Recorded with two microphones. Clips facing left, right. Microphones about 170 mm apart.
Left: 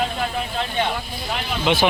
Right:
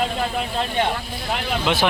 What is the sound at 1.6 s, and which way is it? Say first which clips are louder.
Speech: left 3 dB; centre (ahead or behind).